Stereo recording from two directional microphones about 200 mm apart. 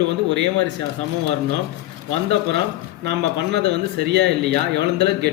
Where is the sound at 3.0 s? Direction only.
55° right (ahead or behind).